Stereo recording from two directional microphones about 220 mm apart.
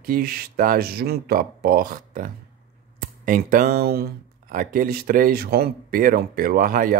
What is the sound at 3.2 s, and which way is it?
Speech, 40° right (ahead or behind).